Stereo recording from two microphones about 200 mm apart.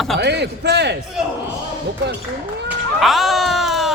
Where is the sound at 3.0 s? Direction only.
Centre (ahead or behind).